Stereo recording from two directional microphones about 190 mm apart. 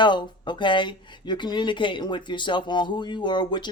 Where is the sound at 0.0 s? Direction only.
25° left (ahead or behind).